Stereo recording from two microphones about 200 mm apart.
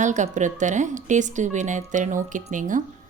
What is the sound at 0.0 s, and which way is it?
A woman's voice, 40° right (ahead or behind).